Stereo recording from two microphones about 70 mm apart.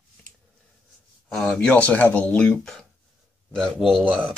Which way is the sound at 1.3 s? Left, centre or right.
Centre.